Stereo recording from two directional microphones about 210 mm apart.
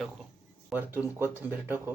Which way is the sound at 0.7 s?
10° right (ahead or behind).